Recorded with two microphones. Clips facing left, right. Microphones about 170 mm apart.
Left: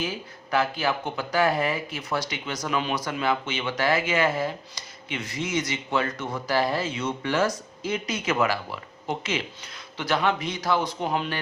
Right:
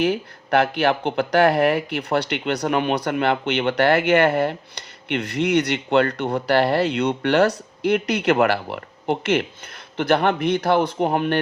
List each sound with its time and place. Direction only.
0.0 s speech: 65° right (ahead or behind)